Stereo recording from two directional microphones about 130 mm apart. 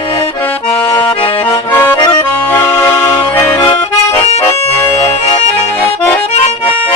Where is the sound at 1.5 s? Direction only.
15° left (ahead or behind).